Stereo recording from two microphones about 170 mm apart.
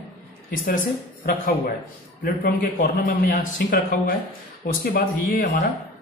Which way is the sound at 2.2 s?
65° left (ahead or behind).